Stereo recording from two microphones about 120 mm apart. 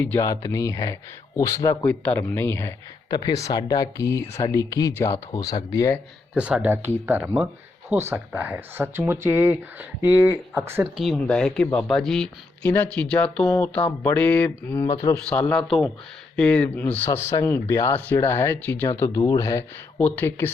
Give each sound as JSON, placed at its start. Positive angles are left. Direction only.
{"t": 0.2, "sound": "speech", "side_deg": 30}
{"t": 1.8, "sound": "speech", "side_deg": 10}
{"t": 3.1, "sound": "speech", "side_deg": 35}
{"t": 6.3, "sound": "speech", "side_deg": -10}
{"t": 10.9, "sound": "speech", "side_deg": 0}
{"t": 15.3, "sound": "speech", "side_deg": 10}
{"t": 17.1, "sound": "speech", "side_deg": 25}
{"t": 20.0, "sound": "speech", "side_deg": 15}